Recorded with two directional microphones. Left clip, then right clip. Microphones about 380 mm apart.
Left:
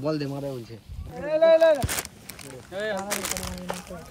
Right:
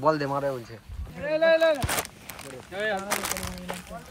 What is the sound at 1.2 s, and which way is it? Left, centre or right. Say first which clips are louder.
Speech: left 3 dB; left.